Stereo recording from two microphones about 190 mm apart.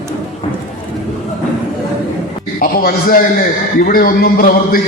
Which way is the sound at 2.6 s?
50° left (ahead or behind).